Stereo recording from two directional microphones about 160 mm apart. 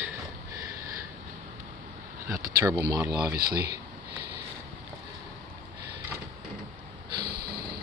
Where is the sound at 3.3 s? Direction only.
75° right (ahead or behind).